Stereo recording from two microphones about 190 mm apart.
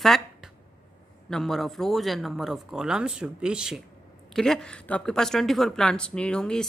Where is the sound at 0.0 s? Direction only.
Centre (ahead or behind).